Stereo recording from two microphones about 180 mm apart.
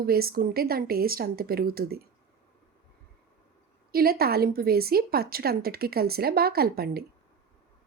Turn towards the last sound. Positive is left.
turn(degrees=-60)  # may be behind; listen again after turning